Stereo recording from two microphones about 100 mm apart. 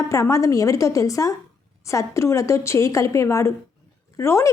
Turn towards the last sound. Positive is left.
turn(degrees=30)  # may be behind; listen again after turning